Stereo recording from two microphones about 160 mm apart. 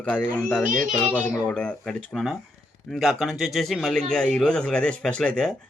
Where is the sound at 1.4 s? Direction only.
5° left (ahead or behind).